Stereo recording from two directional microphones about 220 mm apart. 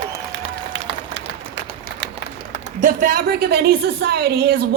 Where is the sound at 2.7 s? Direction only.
40° right (ahead or behind).